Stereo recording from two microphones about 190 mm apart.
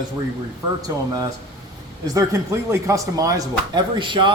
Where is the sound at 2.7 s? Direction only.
15° right (ahead or behind).